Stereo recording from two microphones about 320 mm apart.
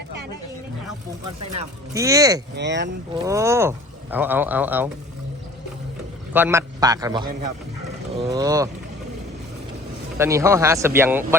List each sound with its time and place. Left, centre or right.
1.5 s speech: centre
2.6 s speech: right
3.2 s speech: centre
6.3 s speech: centre
8.3 s speech: centre
10.2 s speech: centre